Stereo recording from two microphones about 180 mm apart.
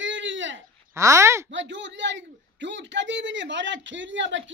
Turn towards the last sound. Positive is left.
turn(degrees=-90)